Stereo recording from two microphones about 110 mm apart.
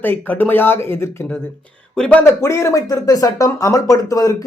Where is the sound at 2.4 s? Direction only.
25° left (ahead or behind).